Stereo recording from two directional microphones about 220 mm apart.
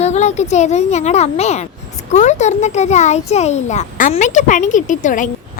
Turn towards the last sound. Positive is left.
turn(degrees=35)  # may be behind; listen again after turning